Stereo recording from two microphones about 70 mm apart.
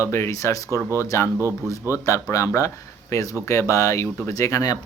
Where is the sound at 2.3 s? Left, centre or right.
Left.